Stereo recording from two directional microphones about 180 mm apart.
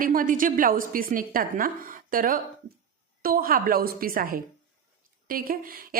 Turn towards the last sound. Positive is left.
turn(degrees=-55)  # may be behind; listen again after turning